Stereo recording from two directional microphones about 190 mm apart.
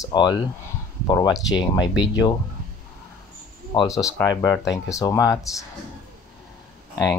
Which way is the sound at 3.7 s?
20° left (ahead or behind).